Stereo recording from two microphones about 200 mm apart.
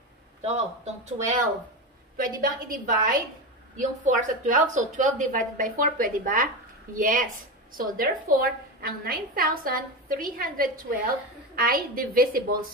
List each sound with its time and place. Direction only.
0.4 s a woman's voice: 35° right (ahead or behind)